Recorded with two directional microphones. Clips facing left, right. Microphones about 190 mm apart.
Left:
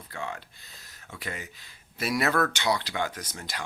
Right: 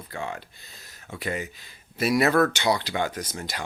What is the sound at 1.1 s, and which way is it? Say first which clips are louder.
Speech: right 8 dB; 15° right (ahead or behind).